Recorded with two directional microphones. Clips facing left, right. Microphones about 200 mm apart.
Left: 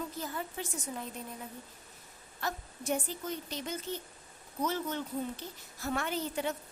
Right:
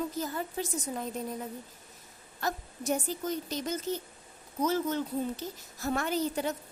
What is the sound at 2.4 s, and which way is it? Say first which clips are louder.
A woman's voice: right 4 dB; 40° right (ahead or behind).